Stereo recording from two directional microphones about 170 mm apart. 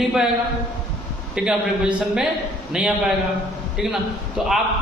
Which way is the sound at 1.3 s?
5° right (ahead or behind).